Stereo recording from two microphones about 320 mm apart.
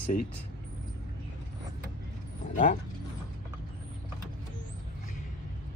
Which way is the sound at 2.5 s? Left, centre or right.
Left.